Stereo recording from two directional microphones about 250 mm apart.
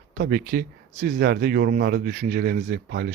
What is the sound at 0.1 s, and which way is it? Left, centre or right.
Speech, right.